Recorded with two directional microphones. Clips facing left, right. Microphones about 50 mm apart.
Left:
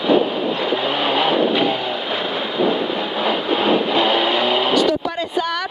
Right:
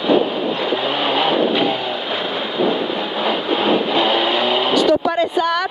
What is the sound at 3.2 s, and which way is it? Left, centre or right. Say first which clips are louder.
Vehicle: even; right.